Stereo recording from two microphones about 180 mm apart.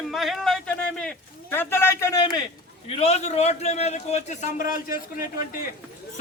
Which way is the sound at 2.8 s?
35° left (ahead or behind).